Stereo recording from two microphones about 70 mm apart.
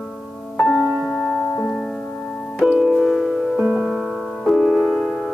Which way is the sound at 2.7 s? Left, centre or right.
Centre.